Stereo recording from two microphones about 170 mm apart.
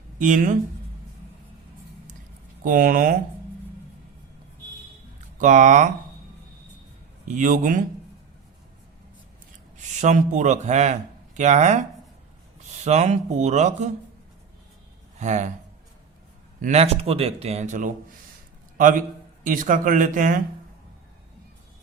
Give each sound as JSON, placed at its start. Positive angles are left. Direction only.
{"t": 0.2, "sound": "speech", "side_deg": -50}
{"t": 2.6, "sound": "speech", "side_deg": -50}
{"t": 5.4, "sound": "speech", "side_deg": -45}
{"t": 7.3, "sound": "speech", "side_deg": -50}
{"t": 10.0, "sound": "speech", "side_deg": -45}
{"t": 15.2, "sound": "speech", "side_deg": -45}
{"t": 16.6, "sound": "a man's voice", "side_deg": -40}